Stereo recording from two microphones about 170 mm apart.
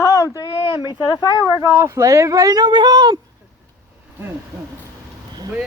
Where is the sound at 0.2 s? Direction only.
20° left (ahead or behind).